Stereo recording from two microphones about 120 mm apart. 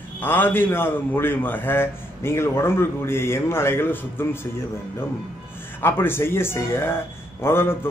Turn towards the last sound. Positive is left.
turn(degrees=20)  # may be behind; listen again after turning